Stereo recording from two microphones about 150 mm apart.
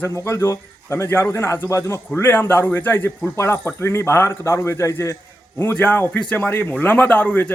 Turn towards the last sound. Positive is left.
turn(degrees=10)  # may be behind; listen again after turning